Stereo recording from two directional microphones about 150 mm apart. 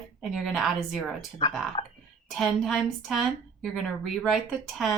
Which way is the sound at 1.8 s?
35° left (ahead or behind).